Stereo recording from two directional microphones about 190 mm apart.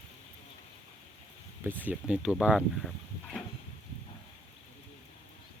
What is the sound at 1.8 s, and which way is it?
Speech, 5° right (ahead or behind).